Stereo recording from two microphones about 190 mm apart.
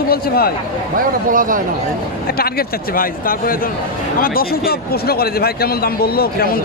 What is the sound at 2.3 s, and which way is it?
Speech, 50° left (ahead or behind).